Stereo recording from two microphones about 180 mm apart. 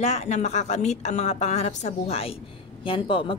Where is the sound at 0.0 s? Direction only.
40° left (ahead or behind).